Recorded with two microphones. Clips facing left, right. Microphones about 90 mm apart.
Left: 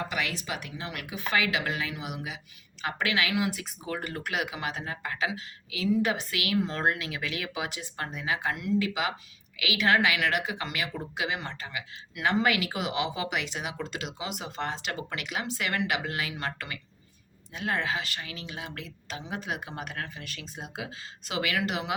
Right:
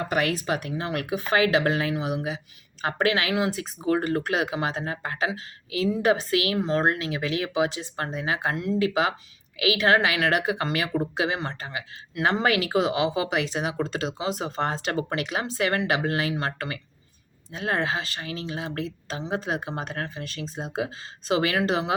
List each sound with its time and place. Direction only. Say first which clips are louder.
0.0 s a woman's voice: right 7 dB; 45° right (ahead or behind)